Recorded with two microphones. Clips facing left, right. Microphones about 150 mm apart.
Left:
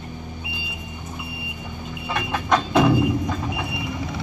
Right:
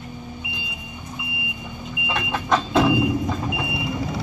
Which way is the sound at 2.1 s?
Centre (ahead or behind).